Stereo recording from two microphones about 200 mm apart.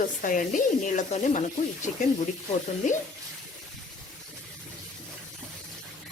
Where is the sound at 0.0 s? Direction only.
40° left (ahead or behind).